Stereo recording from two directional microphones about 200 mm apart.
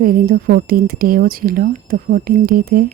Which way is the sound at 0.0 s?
45° right (ahead or behind).